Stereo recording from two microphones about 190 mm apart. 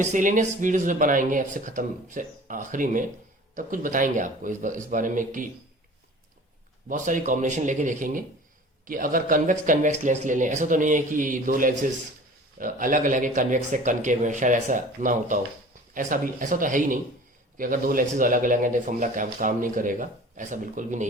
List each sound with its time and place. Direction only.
0.0 s speech: 40° right (ahead or behind)
6.8 s speech: 45° right (ahead or behind)